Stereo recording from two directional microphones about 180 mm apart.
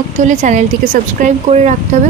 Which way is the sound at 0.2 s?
40° right (ahead or behind).